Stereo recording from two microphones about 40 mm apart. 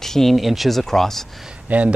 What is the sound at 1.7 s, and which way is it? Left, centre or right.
Speech, right.